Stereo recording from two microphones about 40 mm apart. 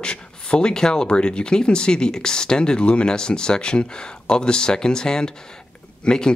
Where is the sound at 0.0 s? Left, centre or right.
Left.